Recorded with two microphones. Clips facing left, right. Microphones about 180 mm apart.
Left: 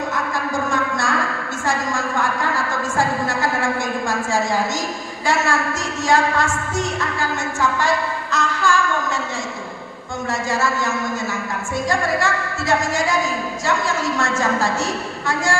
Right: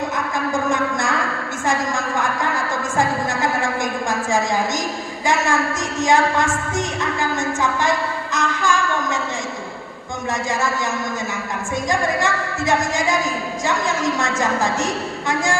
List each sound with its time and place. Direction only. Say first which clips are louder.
0.7 s a sound: right 1 dB; 20° right (ahead or behind)
3.0 s music: right 1 dB; 20° right (ahead or behind)
5.2 s a woman's voice: right 1 dB; 20° right (ahead or behind)
11.9 s a woman's voice: even; 20° right (ahead or behind)